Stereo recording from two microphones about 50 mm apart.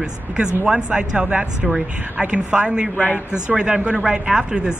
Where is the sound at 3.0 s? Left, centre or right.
Left.